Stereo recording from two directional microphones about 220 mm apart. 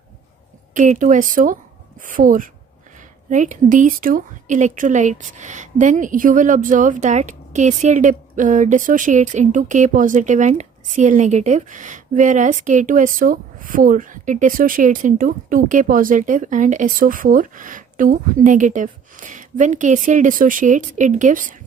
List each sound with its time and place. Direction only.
0.7 s a woman's voice: 35° right (ahead or behind)